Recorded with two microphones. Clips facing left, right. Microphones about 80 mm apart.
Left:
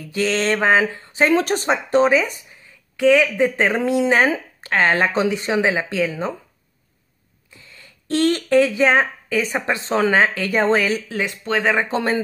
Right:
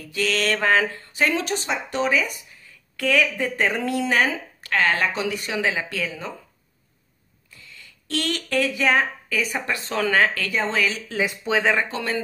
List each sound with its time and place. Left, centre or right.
0.0 s a woman's voice: left
1.3 s a woman's voice: left
7.5 s speech: left
10.5 s a woman's voice: left
11.1 s speech: centre
11.9 s speech: left